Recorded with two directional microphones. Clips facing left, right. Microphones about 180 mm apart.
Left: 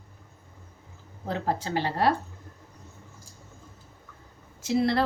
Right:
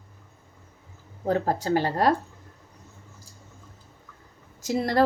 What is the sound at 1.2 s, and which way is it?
Speech, 45° right (ahead or behind).